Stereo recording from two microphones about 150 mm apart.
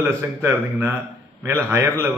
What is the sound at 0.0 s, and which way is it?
A man's voice, 15° right (ahead or behind).